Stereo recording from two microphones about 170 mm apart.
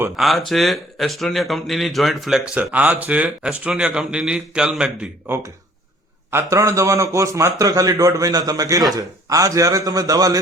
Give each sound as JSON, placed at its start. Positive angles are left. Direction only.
{"t": 0.2, "sound": "a man's voice", "side_deg": 0}